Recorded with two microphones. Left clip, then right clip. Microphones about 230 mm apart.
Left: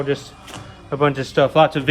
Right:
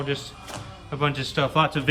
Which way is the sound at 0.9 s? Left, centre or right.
Centre.